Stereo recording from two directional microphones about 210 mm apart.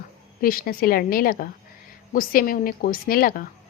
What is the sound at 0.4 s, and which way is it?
Speech, 45° left (ahead or behind).